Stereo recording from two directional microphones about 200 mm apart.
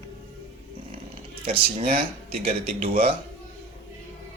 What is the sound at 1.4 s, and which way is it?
Speech, 30° right (ahead or behind).